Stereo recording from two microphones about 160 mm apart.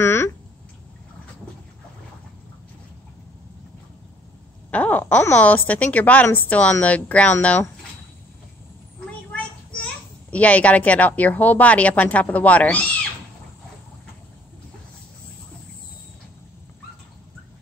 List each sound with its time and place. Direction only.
0.0 s a sound: 15° left (ahead or behind)
4.6 s speech: 10° left (ahead or behind)
10.3 s speech: 10° left (ahead or behind)